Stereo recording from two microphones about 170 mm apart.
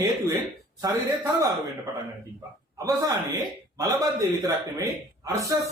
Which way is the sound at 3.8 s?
20° right (ahead or behind).